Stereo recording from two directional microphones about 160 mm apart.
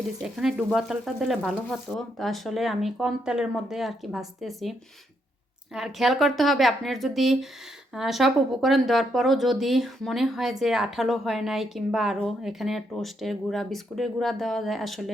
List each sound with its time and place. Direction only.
0.2 s speech: 5° right (ahead or behind)
5.7 s speech: centre (ahead or behind)